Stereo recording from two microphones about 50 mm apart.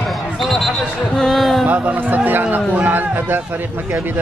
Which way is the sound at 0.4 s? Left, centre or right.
Centre.